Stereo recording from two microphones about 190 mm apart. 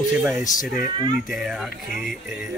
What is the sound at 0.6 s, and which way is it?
Speech, 45° left (ahead or behind).